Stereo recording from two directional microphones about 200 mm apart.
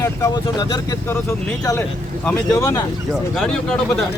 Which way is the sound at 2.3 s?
15° left (ahead or behind).